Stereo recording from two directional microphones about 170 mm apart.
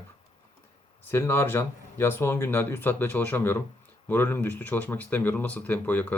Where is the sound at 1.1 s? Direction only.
15° left (ahead or behind).